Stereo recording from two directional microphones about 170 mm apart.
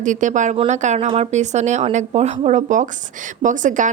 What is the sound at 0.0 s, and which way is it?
Speech, 45° right (ahead or behind).